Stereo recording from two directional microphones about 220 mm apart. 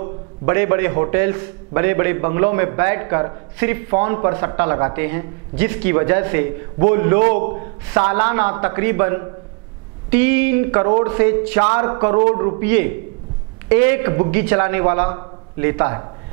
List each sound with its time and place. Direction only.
0.5 s a man's voice: 15° right (ahead or behind)